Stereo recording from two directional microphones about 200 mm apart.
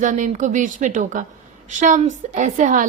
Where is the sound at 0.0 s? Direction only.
40° right (ahead or behind).